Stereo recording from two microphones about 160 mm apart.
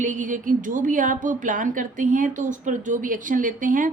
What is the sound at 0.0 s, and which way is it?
A woman's voice, 50° right (ahead or behind).